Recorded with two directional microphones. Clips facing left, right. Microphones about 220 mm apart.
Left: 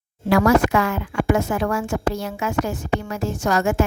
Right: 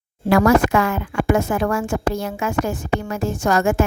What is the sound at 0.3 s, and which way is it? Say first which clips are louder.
Speech: right 2 dB; 50° right (ahead or behind).